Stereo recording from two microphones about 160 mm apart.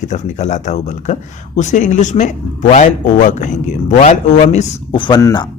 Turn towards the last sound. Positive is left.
turn(degrees=25)  # may be behind; listen again after turning